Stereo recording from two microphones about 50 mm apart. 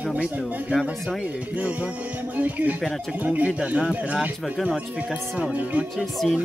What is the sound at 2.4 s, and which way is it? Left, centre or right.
Speech, right.